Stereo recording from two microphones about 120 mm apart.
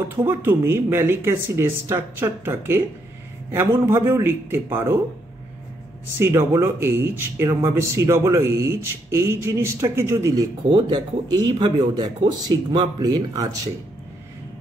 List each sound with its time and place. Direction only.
0.2 s speech: 15° right (ahead or behind)
6.1 s speech: 20° right (ahead or behind)